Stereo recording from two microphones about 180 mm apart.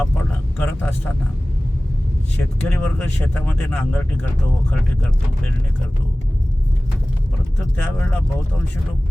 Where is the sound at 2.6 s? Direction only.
10° left (ahead or behind).